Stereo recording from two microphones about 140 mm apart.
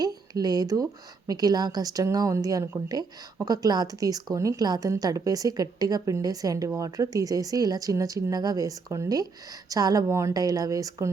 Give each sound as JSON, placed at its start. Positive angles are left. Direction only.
{"t": 0.0, "sound": "a woman's voice", "side_deg": -30}